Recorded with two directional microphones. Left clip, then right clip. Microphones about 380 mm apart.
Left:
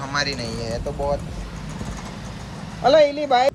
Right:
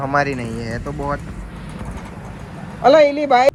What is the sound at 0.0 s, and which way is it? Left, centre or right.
Speech, centre.